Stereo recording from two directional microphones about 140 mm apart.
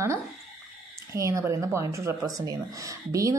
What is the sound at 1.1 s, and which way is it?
A woman's voice, 20° right (ahead or behind).